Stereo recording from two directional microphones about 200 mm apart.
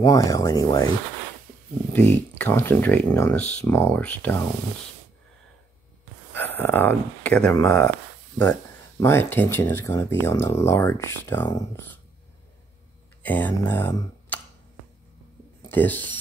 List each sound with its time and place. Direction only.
0.0 s speech: 15° left (ahead or behind)
2.3 s speech: 10° left (ahead or behind)
6.3 s speech: 10° left (ahead or behind)
9.0 s speech: 10° left (ahead or behind)
13.2 s speech: 10° left (ahead or behind)
15.7 s speech: 10° left (ahead or behind)